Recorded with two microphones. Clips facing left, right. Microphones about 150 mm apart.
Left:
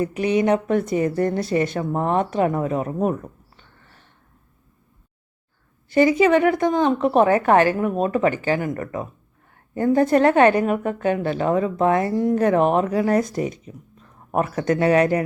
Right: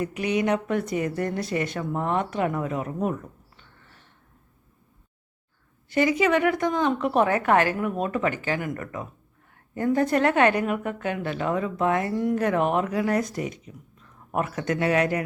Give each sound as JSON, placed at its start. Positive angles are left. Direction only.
{"t": 0.0, "sound": "a woman's voice", "side_deg": 30}
{"t": 5.9, "sound": "a woman's voice", "side_deg": 30}